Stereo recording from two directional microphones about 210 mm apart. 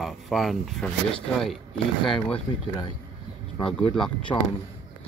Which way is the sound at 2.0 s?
25° left (ahead or behind).